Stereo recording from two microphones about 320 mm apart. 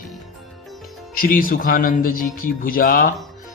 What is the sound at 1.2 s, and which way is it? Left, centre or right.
A man's voice, left.